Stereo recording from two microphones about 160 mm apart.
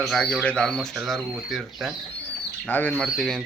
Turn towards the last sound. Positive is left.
turn(degrees=0)  # may be behind; listen again after turning